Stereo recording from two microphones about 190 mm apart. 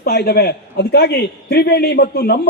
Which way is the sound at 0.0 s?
60° left (ahead or behind).